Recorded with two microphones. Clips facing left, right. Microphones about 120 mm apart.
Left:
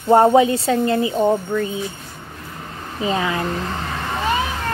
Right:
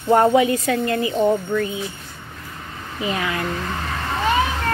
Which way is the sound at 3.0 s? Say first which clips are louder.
Left 3 dB; 25° left (ahead or behind).